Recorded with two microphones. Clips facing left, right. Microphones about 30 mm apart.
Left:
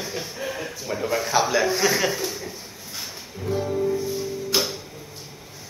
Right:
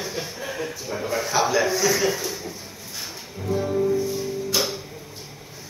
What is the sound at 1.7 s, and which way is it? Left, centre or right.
Speech, left.